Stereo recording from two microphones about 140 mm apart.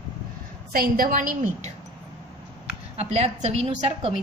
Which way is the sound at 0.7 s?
90° right.